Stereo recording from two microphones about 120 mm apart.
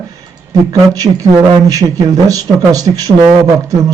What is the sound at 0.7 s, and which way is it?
Speech, 30° right (ahead or behind).